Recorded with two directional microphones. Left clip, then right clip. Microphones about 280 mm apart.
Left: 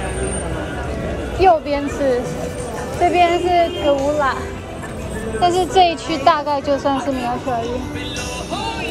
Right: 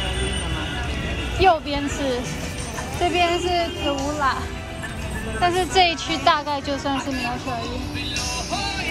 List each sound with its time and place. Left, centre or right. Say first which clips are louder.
1.4 s speech: left 4 dB; centre
5.4 s speech: left 4 dB; centre